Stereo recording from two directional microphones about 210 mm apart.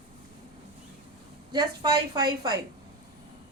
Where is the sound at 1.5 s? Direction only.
20° right (ahead or behind).